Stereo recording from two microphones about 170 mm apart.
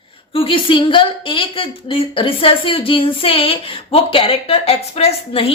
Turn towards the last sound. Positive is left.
turn(degrees=35)  # may be behind; listen again after turning